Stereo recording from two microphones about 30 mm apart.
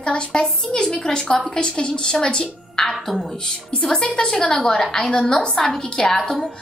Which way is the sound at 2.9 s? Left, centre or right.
Centre.